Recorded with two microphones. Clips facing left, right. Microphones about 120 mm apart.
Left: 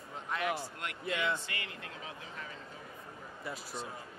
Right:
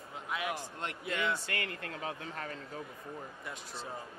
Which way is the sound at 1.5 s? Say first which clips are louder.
Right 5 dB; 55° right (ahead or behind).